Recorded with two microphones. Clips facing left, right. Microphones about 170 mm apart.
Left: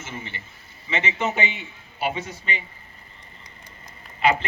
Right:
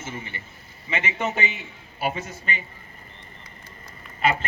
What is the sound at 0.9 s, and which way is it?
A man's voice, 50° right (ahead or behind).